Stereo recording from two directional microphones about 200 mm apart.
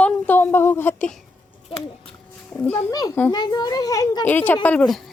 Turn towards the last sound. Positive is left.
turn(degrees=5)  # may be behind; listen again after turning